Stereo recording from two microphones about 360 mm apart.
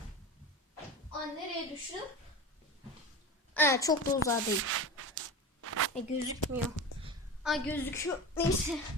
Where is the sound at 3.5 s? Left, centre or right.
Centre.